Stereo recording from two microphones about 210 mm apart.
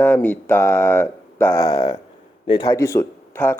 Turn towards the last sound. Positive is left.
turn(degrees=10)  # may be behind; listen again after turning